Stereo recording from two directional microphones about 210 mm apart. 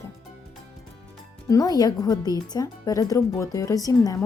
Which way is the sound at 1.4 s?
15° left (ahead or behind).